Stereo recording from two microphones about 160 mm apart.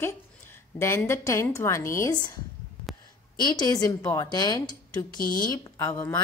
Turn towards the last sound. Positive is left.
turn(degrees=15)  # may be behind; listen again after turning